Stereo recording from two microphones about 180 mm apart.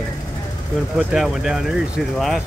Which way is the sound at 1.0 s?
5° right (ahead or behind).